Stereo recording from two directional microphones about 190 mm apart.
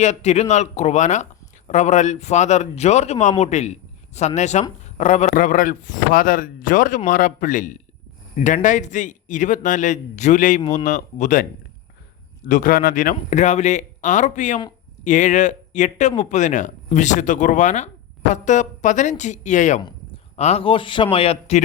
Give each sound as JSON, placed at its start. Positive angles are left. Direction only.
{"t": 0.0, "sound": "speech", "side_deg": 35}
{"t": 12.5, "sound": "speech", "side_deg": 45}